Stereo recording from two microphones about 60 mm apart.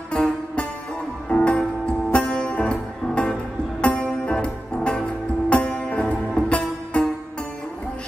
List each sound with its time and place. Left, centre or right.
0.1 s music: centre